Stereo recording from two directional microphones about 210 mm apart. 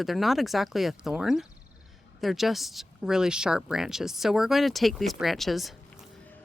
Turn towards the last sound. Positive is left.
turn(degrees=0)  # may be behind; listen again after turning